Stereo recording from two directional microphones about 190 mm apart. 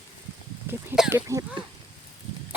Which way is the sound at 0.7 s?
5° right (ahead or behind).